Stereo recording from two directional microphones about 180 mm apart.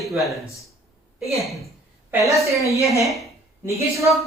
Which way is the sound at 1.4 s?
Centre (ahead or behind).